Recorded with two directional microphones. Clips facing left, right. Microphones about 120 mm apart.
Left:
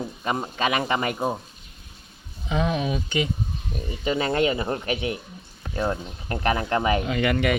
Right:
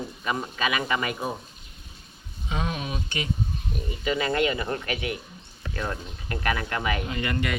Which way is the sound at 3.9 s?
30° left (ahead or behind).